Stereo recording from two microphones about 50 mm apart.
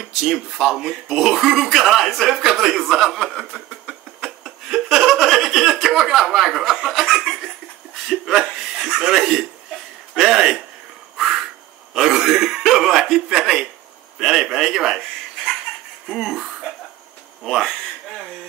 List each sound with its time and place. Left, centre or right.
0.2 s a man's voice: centre
3.3 s a sound: centre
4.2 s a man's voice: centre
11.1 s frog: centre
11.9 s a man's voice: centre
16.1 s a man's voice: centre